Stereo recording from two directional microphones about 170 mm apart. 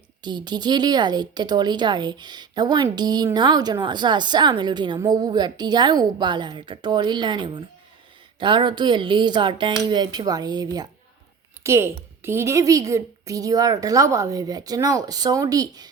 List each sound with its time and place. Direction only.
0.2 s speech: 25° right (ahead or behind)